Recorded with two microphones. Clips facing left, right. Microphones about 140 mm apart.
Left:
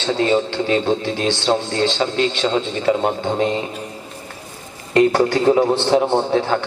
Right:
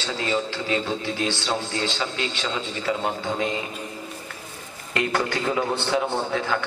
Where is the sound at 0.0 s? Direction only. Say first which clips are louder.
Left 8 dB; 30° left (ahead or behind).